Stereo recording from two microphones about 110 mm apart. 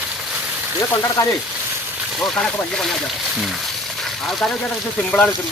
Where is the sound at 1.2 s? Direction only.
30° left (ahead or behind).